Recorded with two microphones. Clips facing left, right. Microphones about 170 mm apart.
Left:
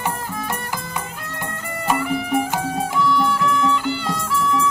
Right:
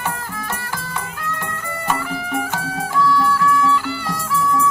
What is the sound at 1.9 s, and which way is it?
Music, 20° left (ahead or behind).